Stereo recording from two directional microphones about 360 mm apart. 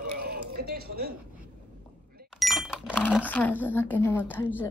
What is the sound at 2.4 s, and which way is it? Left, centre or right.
Cash register, centre.